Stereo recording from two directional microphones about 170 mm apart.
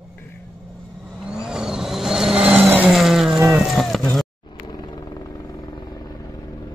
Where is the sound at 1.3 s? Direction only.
5° right (ahead or behind).